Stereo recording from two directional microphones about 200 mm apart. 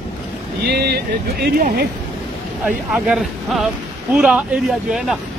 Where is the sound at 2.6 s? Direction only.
5° right (ahead or behind).